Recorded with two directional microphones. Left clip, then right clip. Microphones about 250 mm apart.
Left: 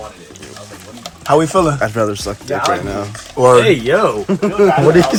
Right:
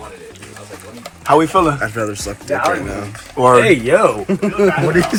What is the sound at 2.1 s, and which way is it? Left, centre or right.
A man's voice, centre.